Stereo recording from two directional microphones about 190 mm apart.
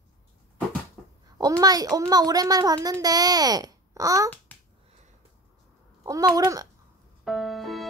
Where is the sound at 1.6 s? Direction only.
20° right (ahead or behind).